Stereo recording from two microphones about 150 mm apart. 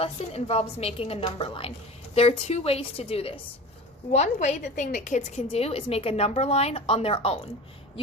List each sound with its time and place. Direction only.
0.0 s a woman's voice: 40° left (ahead or behind)
4.1 s a woman's voice: 50° left (ahead or behind)